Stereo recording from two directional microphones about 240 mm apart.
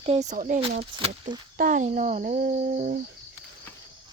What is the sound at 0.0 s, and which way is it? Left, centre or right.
Speech, right.